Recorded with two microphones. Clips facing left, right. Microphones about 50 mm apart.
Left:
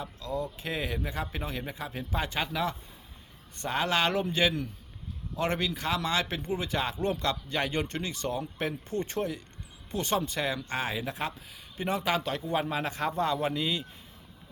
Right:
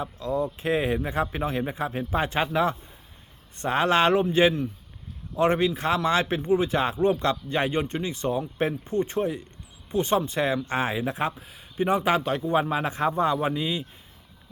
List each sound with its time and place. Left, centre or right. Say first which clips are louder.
0.0 s a man's voice: right 7 dB; right
12.4 s speech: right 6 dB; centre